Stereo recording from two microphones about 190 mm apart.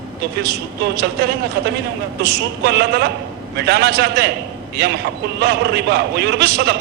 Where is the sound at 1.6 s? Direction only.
60° right (ahead or behind).